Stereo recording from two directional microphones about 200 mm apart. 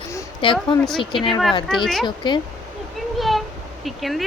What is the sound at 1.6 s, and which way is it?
Speech, centre (ahead or behind).